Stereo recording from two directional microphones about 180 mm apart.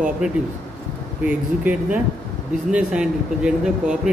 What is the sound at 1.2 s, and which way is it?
A man's voice, 5° right (ahead or behind).